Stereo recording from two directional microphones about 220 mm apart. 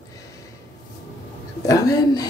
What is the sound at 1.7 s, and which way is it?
Speech, 15° left (ahead or behind).